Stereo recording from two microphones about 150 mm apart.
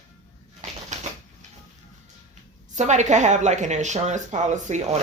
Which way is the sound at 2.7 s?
55° right (ahead or behind).